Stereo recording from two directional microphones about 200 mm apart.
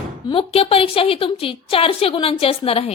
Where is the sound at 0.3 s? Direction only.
30° left (ahead or behind).